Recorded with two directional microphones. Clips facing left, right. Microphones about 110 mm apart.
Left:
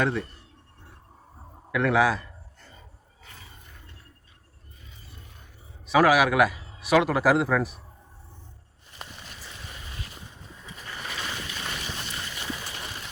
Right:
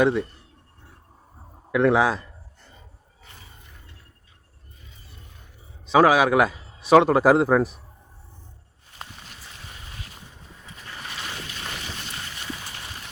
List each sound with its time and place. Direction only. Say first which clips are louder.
0.0 s speech: right 6 dB; 15° right (ahead or behind)
1.7 s a man's voice: right 3 dB; 25° right (ahead or behind)
5.8 s a man's voice: right 3 dB; 25° right (ahead or behind)